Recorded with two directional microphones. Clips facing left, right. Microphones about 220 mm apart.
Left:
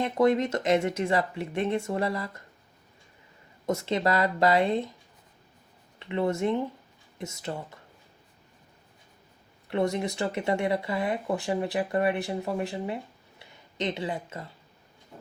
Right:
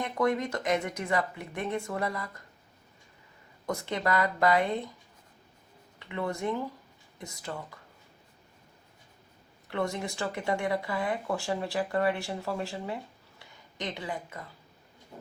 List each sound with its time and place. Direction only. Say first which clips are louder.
0.0 s speech: left 5 dB; 25° left (ahead or behind)
3.7 s speech: left 4 dB; 25° left (ahead or behind)
6.0 s speech: left 6 dB; 25° left (ahead or behind)
9.6 s speech: left 5 dB; 20° left (ahead or behind)